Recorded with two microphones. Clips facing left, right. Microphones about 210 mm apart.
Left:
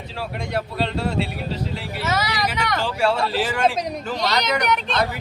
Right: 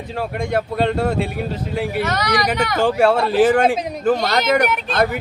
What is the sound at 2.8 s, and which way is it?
Speech, 50° right (ahead or behind).